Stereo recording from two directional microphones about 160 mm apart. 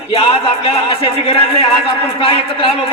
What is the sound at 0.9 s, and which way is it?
A man's voice, 35° left (ahead or behind).